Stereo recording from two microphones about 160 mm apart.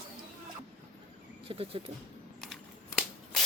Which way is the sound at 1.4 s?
35° right (ahead or behind).